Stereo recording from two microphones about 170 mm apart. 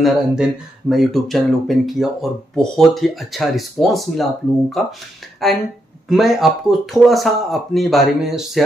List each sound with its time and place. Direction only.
0.0 s speech: centre (ahead or behind)